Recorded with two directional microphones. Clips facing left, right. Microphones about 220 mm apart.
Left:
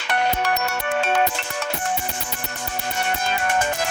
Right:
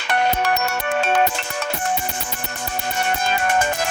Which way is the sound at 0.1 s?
45° right (ahead or behind).